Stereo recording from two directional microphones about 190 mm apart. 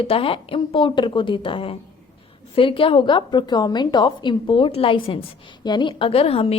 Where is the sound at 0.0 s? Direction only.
30° left (ahead or behind).